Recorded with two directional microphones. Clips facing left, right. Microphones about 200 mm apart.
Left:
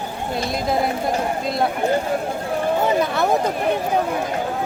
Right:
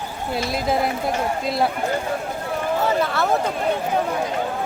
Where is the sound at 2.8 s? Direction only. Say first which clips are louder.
Even; 15° left (ahead or behind).